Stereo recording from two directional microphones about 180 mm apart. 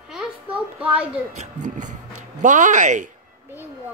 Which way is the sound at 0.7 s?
5° right (ahead or behind).